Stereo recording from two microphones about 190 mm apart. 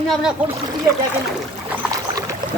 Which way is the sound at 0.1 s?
Centre (ahead or behind).